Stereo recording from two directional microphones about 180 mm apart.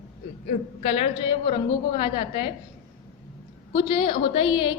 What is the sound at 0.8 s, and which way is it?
A woman's voice, 35° left (ahead or behind).